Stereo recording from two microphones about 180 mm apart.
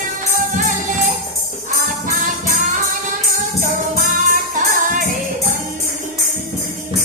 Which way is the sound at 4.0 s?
45° right (ahead or behind).